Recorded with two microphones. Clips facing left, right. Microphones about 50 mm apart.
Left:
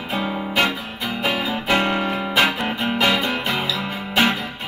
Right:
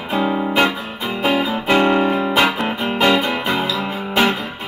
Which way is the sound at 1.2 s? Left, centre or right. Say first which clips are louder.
Right 5 dB; right.